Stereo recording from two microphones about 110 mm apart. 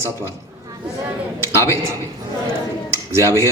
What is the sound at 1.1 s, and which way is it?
Speech, 25° right (ahead or behind).